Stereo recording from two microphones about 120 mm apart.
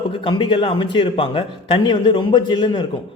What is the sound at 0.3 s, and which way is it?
A man's voice, 45° left (ahead or behind).